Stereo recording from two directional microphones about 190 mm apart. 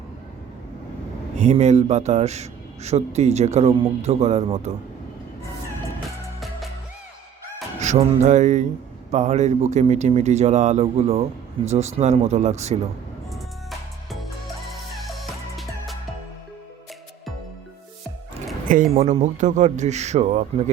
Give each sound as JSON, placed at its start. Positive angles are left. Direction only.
{"t": 1.4, "sound": "a man's voice", "side_deg": -35}
{"t": 7.8, "sound": "a man's voice", "side_deg": -35}
{"t": 13.3, "sound": "music", "side_deg": 0}
{"t": 18.7, "sound": "a man's voice", "side_deg": -45}